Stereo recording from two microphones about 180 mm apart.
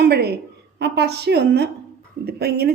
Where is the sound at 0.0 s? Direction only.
65° right (ahead or behind).